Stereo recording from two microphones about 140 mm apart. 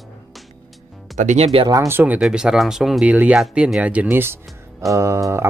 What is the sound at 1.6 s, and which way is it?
Speech, 20° right (ahead or behind).